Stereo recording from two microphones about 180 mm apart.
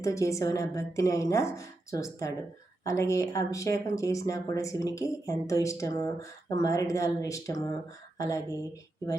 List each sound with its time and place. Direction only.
0.0 s speech: 15° left (ahead or behind)